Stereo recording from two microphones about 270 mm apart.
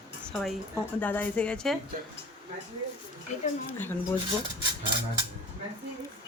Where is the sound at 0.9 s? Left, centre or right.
Centre.